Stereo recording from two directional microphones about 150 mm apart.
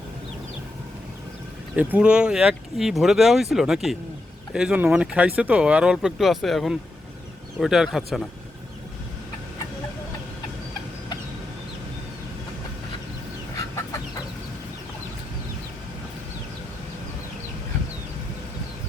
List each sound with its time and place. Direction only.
1.7 s speech: 10° right (ahead or behind)
13.6 s chicken: 20° left (ahead or behind)